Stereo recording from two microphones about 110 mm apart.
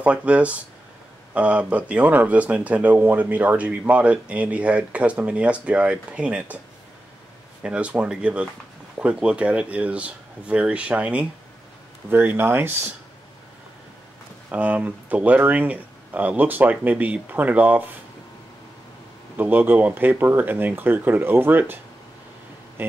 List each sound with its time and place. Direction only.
0.0 s speech: 10° right (ahead or behind)
7.6 s speech: 10° right (ahead or behind)
14.5 s speech: 15° right (ahead or behind)
19.3 s speech: 15° right (ahead or behind)
22.8 s speech: 20° right (ahead or behind)